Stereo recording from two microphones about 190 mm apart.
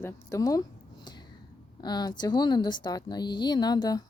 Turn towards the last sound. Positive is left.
turn(degrees=20)  # may be behind; listen again after turning